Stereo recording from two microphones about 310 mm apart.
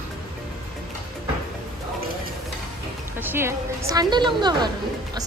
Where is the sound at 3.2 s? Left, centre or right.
Centre.